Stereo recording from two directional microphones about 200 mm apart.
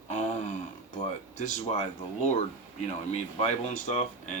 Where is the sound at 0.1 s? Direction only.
35° left (ahead or behind).